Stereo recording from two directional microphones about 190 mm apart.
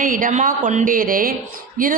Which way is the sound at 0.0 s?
45° right (ahead or behind).